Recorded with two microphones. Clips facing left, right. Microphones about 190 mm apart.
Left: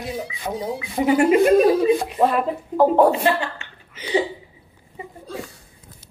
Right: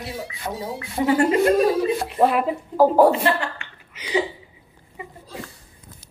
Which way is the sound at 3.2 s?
20° left (ahead or behind).